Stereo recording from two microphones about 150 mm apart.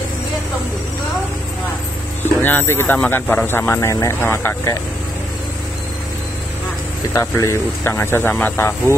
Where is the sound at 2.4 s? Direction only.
15° left (ahead or behind).